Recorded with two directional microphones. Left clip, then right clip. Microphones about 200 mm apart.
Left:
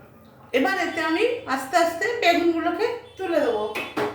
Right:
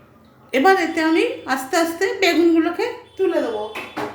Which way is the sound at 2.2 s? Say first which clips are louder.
Right 5 dB; 50° right (ahead or behind).